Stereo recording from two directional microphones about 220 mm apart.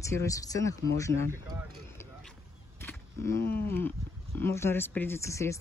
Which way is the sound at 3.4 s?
45° left (ahead or behind).